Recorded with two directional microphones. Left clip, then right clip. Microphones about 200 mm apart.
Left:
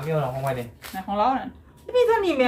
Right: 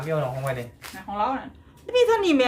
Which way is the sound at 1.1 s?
55° left (ahead or behind).